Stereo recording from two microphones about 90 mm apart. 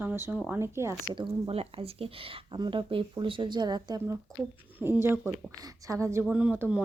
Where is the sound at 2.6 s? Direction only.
65° right (ahead or behind); by 4.0 s 50° right (ahead or behind).